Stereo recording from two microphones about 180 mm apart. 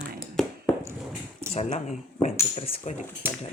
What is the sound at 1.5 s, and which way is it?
Speech, 40° left (ahead or behind).